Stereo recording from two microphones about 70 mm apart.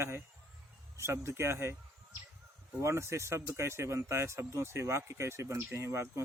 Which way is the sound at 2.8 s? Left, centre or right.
Right.